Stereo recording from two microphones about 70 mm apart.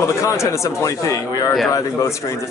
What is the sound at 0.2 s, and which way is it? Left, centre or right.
Speech, left.